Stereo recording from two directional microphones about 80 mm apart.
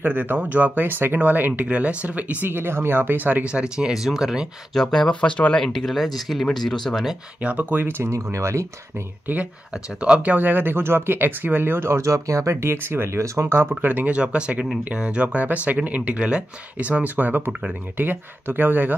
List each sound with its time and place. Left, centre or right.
0.0 s speech: right; by 4.5 s centre
4.7 s speech: centre
7.4 s speech: right
9.9 s speech: centre; by 12.7 s right
12.7 s speech: right
13.7 s speech: right